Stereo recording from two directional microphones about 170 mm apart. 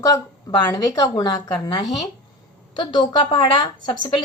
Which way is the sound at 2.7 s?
30° left (ahead or behind).